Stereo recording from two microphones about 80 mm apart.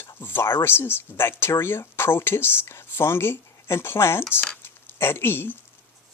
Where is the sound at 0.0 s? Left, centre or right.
Left.